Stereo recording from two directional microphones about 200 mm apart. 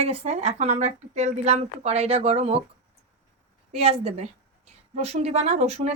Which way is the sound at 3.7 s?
30° right (ahead or behind).